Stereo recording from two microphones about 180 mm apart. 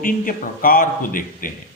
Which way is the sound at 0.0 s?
50° left (ahead or behind).